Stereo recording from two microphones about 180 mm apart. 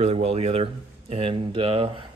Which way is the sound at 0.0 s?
35° right (ahead or behind).